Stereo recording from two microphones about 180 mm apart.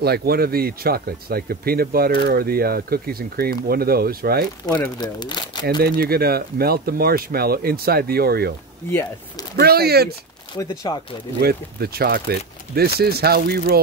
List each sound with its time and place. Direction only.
0.0 s speech: 60° right (ahead or behind)
4.6 s speech: 20° left (ahead or behind)
5.7 s speech: 55° right (ahead or behind)
9.6 s speech: 60° right (ahead or behind)
10.5 s speech: 20° left (ahead or behind)
11.4 s speech: 60° right (ahead or behind)